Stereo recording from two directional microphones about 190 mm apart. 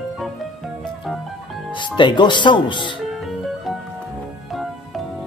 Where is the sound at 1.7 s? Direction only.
25° left (ahead or behind).